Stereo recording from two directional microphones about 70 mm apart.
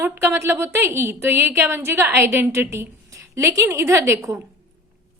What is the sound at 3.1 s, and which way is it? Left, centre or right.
A woman's voice, right.